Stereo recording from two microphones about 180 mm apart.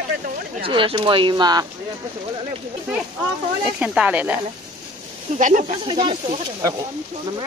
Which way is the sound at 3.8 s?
5° right (ahead or behind).